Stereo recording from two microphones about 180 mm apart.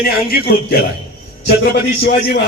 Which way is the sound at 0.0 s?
60° left (ahead or behind).